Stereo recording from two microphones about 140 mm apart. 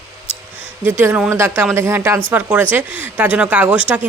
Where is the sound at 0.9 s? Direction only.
15° right (ahead or behind).